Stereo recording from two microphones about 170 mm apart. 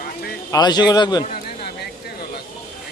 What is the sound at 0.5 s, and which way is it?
Speech, 25° left (ahead or behind).